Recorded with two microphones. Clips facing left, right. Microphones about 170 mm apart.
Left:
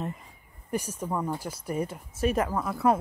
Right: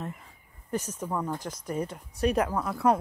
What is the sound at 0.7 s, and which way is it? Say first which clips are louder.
Speech: left 1 dB; 10° left (ahead or behind).